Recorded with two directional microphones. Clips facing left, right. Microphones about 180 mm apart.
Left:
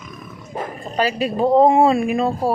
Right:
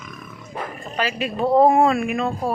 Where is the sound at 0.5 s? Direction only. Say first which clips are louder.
Left 4 dB; 40° left (ahead or behind).